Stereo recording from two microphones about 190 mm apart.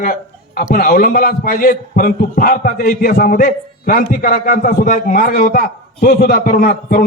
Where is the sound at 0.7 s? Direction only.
50° left (ahead or behind).